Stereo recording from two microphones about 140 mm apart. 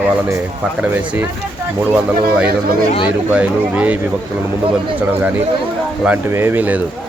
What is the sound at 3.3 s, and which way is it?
Speech, 10° right (ahead or behind).